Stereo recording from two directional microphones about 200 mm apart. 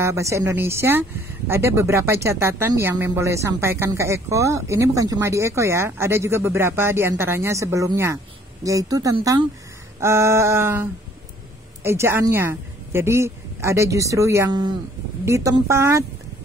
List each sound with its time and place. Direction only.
0.0 s speech: 15° right (ahead or behind)